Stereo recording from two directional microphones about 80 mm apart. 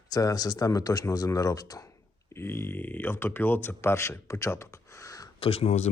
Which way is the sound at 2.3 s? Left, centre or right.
Left.